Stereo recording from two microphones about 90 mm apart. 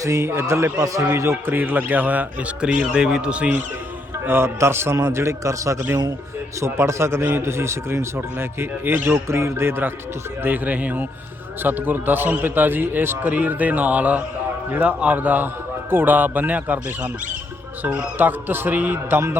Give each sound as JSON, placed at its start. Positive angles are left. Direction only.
{"t": 0.0, "sound": "a man's voice", "side_deg": -30}
{"t": 4.3, "sound": "a man's voice", "side_deg": -30}